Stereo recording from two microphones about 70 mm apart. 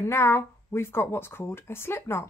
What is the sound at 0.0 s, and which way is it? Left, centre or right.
A woman's voice, left.